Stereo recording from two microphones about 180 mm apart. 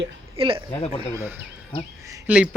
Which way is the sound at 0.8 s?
35° left (ahead or behind).